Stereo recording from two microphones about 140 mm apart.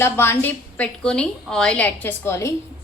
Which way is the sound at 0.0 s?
15° left (ahead or behind).